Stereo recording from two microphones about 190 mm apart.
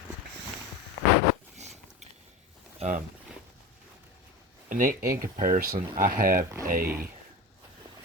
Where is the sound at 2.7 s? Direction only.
40° right (ahead or behind).